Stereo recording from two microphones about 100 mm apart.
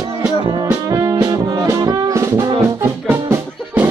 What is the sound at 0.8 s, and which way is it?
Music, 35° right (ahead or behind).